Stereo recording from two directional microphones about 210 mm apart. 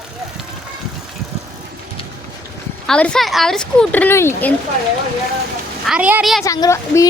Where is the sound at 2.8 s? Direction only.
5° left (ahead or behind).